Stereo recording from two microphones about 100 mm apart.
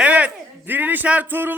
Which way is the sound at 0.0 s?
15° right (ahead or behind).